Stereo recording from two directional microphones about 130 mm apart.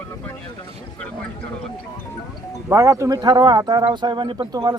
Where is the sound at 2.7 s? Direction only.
25° right (ahead or behind).